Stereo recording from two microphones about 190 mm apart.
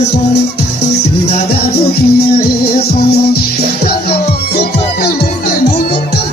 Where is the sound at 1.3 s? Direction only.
55° left (ahead or behind).